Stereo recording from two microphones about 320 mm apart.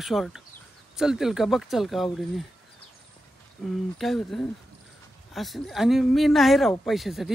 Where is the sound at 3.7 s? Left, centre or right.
Centre.